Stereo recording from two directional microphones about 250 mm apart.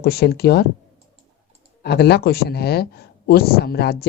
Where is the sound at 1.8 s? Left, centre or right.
Left.